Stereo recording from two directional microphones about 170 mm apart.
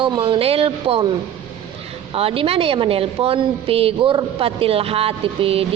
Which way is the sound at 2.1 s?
35° right (ahead or behind).